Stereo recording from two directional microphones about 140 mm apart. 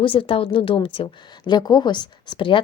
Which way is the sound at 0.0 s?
40° left (ahead or behind).